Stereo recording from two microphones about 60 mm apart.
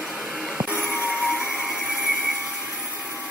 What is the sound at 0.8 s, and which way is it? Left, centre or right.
Music, right.